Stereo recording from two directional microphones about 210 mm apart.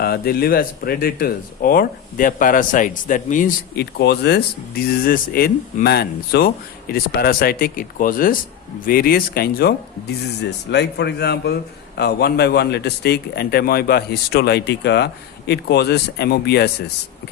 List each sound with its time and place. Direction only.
0.0 s speech: 45° left (ahead or behind)